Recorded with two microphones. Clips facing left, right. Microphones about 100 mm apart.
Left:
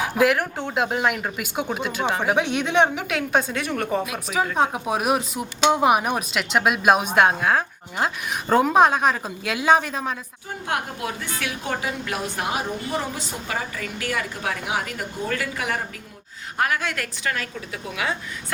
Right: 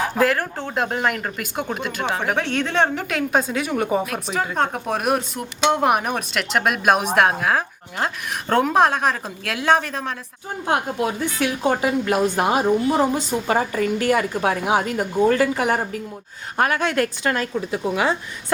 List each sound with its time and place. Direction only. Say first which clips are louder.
0.0 s speech: even; 5° left (ahead or behind)
4.0 s speech: even; 5° left (ahead or behind)
11.3 s a woman's voice: right 9 dB; 30° right (ahead or behind)